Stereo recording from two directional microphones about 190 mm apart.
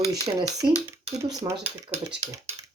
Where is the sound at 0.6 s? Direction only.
5° right (ahead or behind).